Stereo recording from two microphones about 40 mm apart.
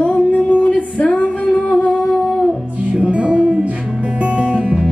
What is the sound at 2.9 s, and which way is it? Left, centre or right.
Music, right.